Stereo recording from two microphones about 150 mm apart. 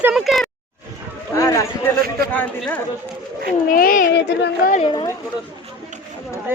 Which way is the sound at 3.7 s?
70° left (ahead or behind).